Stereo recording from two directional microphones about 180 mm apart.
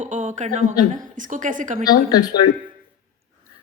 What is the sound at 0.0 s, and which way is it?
A woman's voice, 45° right (ahead or behind).